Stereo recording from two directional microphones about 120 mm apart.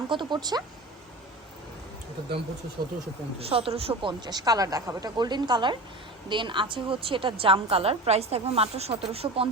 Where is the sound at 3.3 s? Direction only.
55° right (ahead or behind).